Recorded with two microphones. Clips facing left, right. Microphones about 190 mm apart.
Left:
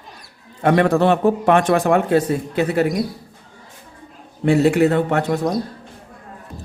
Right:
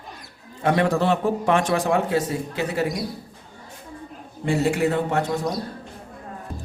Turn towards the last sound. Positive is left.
turn(degrees=65)  # may be behind; listen again after turning